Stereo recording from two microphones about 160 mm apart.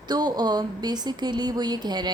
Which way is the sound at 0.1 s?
25° right (ahead or behind).